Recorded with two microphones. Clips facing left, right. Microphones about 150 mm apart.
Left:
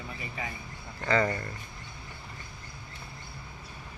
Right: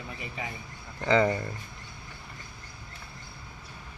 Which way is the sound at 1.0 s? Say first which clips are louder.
Right 3 dB; 15° right (ahead or behind).